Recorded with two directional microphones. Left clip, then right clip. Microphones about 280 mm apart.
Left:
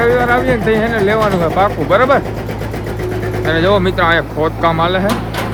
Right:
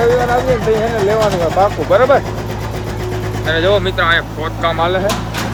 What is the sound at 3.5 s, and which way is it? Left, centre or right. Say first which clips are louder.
Speech: left 1 dB; left.